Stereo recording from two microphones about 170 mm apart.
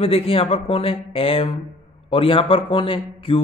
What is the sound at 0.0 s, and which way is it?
Speech, 35° left (ahead or behind).